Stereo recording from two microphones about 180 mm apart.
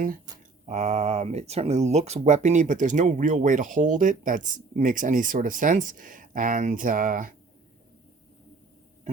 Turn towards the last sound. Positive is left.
turn(degrees=-50)  # may be behind; listen again after turning